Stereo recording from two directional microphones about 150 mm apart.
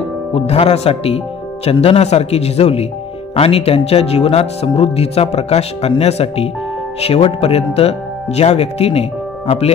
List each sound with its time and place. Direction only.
0.3 s speech: 45° left (ahead or behind)